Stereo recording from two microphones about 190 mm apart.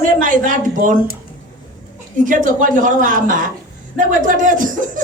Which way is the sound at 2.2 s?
45° right (ahead or behind).